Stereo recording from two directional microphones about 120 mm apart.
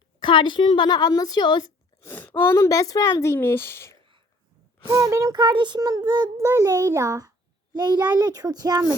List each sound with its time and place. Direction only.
0.2 s speech: 45° left (ahead or behind)
2.0 s speech: 15° left (ahead or behind)
4.9 s a child's voice: 25° right (ahead or behind)
5.4 s a child's voice: 40° right (ahead or behind)